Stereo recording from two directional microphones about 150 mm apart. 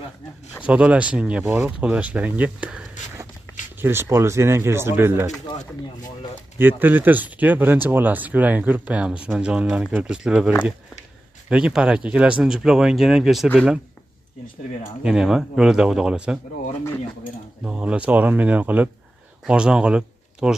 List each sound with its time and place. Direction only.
0.7 s speech: 10° right (ahead or behind)
6.6 s speech: 10° right (ahead or behind)
15.0 s speech: 5° right (ahead or behind)
17.6 s speech: 5° right (ahead or behind)